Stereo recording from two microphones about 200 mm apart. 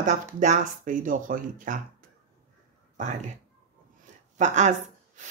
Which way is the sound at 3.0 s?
40° right (ahead or behind).